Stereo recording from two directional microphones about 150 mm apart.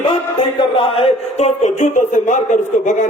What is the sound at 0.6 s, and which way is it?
A man's voice, 40° left (ahead or behind).